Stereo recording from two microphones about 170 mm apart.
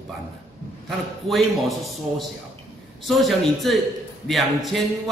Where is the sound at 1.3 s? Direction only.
Centre (ahead or behind).